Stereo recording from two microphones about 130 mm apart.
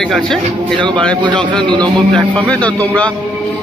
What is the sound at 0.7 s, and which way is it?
A man's voice, 35° right (ahead or behind).